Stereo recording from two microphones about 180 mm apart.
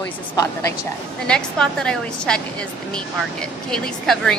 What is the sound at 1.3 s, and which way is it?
A woman's voice, 5° left (ahead or behind).